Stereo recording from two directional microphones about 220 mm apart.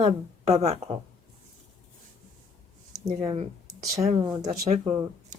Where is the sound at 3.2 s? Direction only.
20° right (ahead or behind).